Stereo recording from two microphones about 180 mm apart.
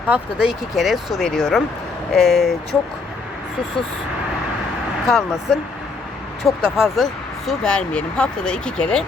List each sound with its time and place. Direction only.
0.1 s speech: 5° right (ahead or behind)
5.0 s speech: centre (ahead or behind)